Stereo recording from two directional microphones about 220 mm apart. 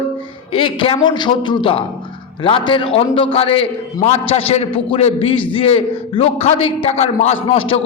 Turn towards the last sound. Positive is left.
turn(degrees=25)  # may be behind; listen again after turning